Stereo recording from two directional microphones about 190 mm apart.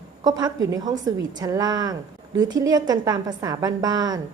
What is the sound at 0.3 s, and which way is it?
Speech, 20° right (ahead or behind).